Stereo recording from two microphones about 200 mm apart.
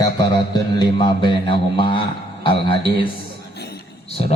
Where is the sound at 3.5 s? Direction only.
55° left (ahead or behind).